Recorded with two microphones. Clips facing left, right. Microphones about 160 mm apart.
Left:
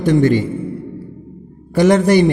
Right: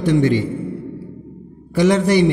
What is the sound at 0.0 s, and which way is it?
Speech, 45° left (ahead or behind).